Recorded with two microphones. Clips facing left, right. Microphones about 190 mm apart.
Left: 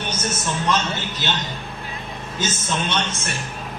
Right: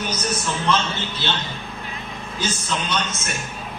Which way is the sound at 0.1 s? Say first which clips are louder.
Right 1 dB; 25° left (ahead or behind).